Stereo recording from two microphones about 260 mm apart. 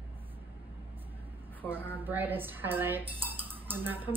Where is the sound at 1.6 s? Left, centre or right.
Centre.